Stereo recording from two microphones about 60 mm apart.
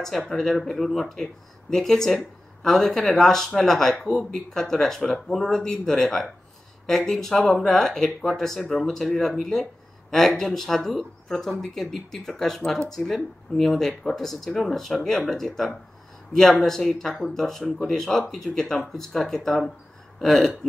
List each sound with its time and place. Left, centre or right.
0.3 s speech: centre